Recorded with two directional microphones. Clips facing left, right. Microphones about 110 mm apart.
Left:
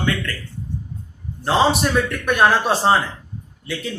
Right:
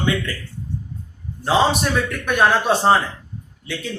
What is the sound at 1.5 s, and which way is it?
A man's voice, centre (ahead or behind).